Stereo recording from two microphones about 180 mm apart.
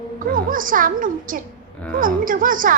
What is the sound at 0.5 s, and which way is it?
A woman's voice, 50° right (ahead or behind).